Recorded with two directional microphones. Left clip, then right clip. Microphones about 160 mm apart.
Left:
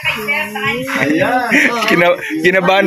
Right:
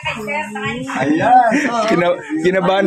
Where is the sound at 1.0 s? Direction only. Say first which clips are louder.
Right 4 dB; 5° right (ahead or behind).